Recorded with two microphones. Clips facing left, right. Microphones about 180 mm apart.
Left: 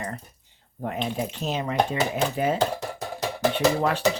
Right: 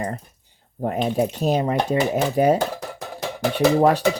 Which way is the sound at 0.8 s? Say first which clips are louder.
Right 7 dB; 40° right (ahead or behind).